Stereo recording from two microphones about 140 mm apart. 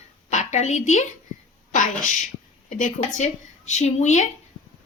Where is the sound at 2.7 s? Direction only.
65° left (ahead or behind).